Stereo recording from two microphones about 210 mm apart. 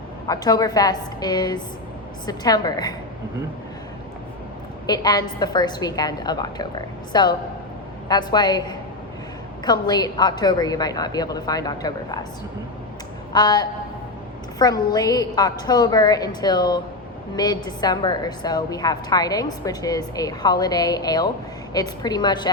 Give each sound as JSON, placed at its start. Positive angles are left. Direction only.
{"t": 0.3, "sound": "a woman's voice", "side_deg": 20}
{"t": 4.9, "sound": "a woman's voice", "side_deg": 20}
{"t": 13.3, "sound": "a woman's voice", "side_deg": 20}